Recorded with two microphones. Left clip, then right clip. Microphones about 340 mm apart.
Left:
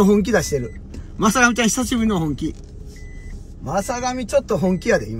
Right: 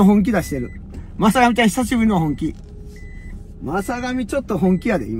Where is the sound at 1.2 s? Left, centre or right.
Centre.